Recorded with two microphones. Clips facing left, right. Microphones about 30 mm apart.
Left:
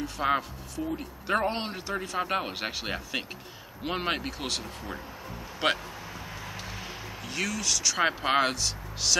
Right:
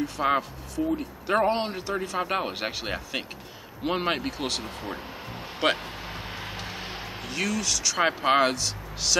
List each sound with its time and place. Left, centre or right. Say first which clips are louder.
0.0 s speech: right 3 dB; centre
6.0 s vehicle: right 4 dB; right
7.2 s speech: right 2 dB; centre